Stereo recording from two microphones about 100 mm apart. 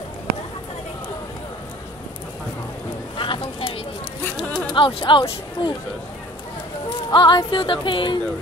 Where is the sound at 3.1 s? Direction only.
60° left (ahead or behind).